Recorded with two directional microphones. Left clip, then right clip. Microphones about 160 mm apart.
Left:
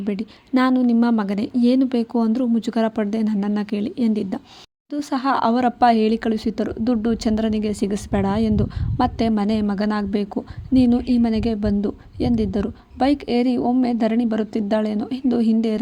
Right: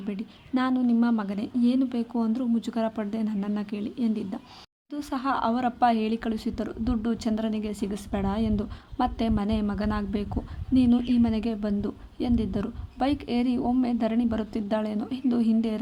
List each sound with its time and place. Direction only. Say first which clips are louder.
0.0 s speech: left 9 dB; 40° left (ahead or behind)